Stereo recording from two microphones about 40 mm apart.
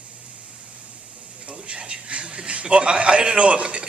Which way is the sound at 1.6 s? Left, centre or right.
Right.